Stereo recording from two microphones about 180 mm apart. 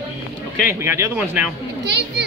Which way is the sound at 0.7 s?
15° right (ahead or behind).